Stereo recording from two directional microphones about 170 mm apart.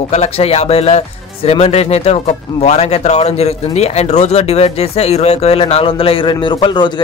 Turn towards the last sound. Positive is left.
turn(degrees=30)  # may be behind; listen again after turning